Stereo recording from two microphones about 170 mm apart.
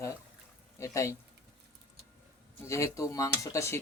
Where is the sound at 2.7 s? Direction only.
15° left (ahead or behind).